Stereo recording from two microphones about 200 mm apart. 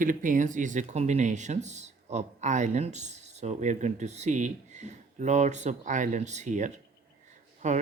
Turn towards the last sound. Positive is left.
turn(degrees=-35)  # may be behind; listen again after turning